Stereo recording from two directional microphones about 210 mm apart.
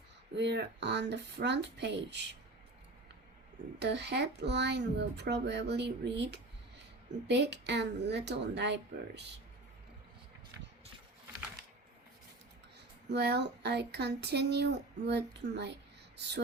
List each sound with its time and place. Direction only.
0.3 s speech: 55° right (ahead or behind)
3.8 s speech: 55° right (ahead or behind)
13.1 s speech: 55° right (ahead or behind)